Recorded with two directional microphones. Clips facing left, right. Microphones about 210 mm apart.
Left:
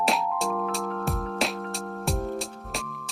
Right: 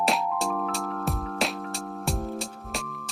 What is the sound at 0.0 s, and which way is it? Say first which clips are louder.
Music: even; centre (ahead or behind).